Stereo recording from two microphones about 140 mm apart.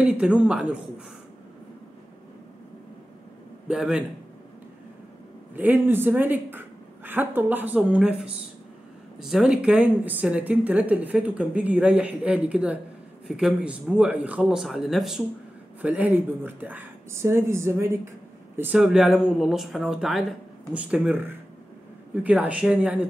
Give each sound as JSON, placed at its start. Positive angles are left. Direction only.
{"t": 0.0, "sound": "speech", "side_deg": -5}
{"t": 3.6, "sound": "speech", "side_deg": -5}
{"t": 5.6, "sound": "speech", "side_deg": -15}
{"t": 18.6, "sound": "speech", "side_deg": -5}